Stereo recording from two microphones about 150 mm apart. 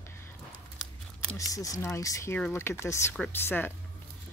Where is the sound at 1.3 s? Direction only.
25° left (ahead or behind).